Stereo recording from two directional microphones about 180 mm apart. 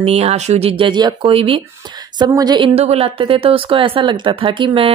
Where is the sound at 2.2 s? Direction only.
20° right (ahead or behind).